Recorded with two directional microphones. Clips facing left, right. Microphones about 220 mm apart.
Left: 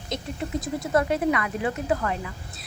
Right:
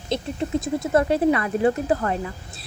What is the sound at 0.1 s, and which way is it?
Speech, 25° right (ahead or behind).